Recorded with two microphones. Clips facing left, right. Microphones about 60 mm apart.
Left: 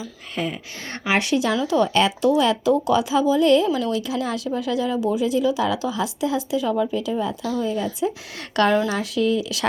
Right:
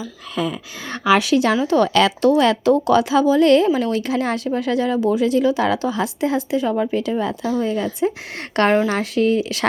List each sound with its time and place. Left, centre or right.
0.3 s speech: right
1.6 s speech: right
2.4 s a woman's voice: right
8.5 s speech: right